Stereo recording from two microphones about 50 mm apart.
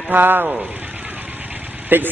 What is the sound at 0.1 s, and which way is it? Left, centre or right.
Speech, right.